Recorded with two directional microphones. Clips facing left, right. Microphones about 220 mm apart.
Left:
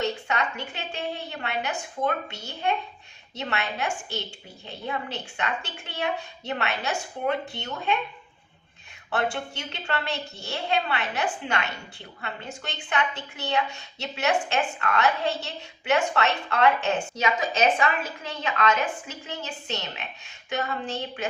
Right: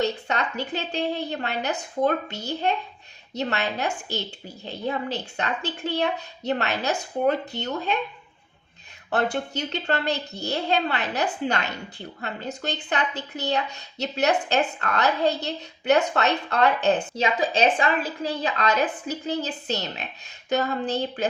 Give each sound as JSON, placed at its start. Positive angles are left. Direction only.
{"t": 0.0, "sound": "a woman's voice", "side_deg": -35}
{"t": 9.0, "sound": "a woman's voice", "side_deg": -40}